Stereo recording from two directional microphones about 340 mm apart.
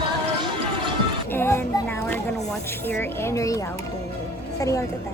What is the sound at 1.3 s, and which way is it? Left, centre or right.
Speech, centre.